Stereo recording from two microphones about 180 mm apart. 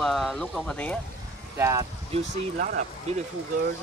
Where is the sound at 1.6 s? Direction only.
15° right (ahead or behind).